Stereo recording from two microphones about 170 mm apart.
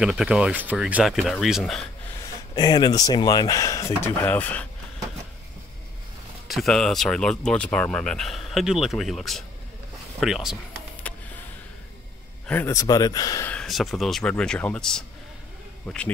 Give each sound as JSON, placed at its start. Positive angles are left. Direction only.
{"t": 0.0, "sound": "speech", "side_deg": -5}
{"t": 2.5, "sound": "speech", "side_deg": 25}
{"t": 6.4, "sound": "speech", "side_deg": 0}
{"t": 11.1, "sound": "a sound", "side_deg": 10}
{"t": 12.4, "sound": "speech", "side_deg": 15}
{"t": 13.5, "sound": "speech", "side_deg": 5}